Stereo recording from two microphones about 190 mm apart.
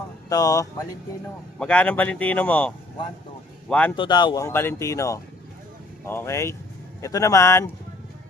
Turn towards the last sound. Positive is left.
turn(degrees=15)  # may be behind; listen again after turning